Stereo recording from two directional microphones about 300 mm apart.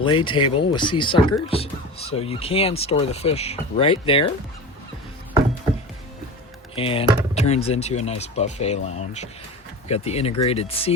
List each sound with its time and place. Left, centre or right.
0.0 s speech: centre
6.7 s speech: centre